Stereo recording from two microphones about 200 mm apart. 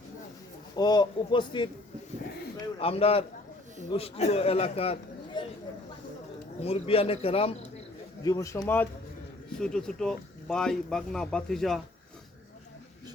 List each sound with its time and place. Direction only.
0.8 s a man's voice: 20° left (ahead or behind)
2.7 s a man's voice: 30° left (ahead or behind)
6.6 s a man's voice: 30° left (ahead or behind)
8.2 s speech: 15° left (ahead or behind)